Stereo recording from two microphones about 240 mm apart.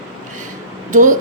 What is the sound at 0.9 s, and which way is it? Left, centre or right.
Speech, right.